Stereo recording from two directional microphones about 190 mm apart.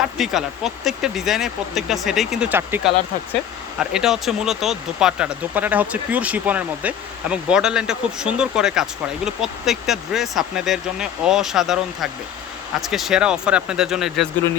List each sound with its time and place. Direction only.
0.0 s speech: centre (ahead or behind)